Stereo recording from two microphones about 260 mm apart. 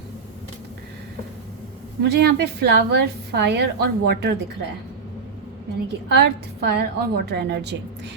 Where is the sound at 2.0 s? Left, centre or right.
Right.